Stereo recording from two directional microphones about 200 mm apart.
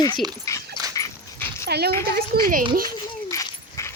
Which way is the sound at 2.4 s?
45° right (ahead or behind).